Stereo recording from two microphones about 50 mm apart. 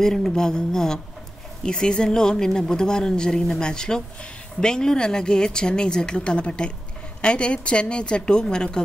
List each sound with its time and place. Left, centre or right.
0.0 s a woman's voice: centre